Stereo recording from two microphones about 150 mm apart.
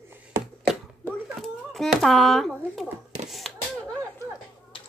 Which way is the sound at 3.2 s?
Centre (ahead or behind).